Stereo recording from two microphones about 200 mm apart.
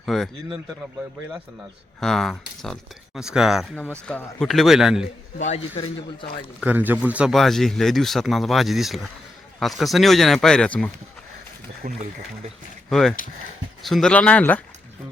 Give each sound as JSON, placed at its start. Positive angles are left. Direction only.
{"t": 0.0, "sound": "a man's voice", "side_deg": 0}
{"t": 2.0, "sound": "a man's voice", "side_deg": 0}
{"t": 5.4, "sound": "speech", "side_deg": 30}
{"t": 6.6, "sound": "a man's voice", "side_deg": -10}
{"t": 12.9, "sound": "a man's voice", "side_deg": 0}